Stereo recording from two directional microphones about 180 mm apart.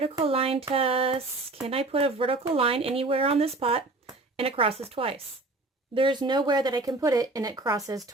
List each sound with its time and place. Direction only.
0.0 s speech: 30° right (ahead or behind)